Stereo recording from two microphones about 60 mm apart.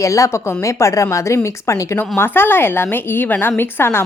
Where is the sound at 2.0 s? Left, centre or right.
Left.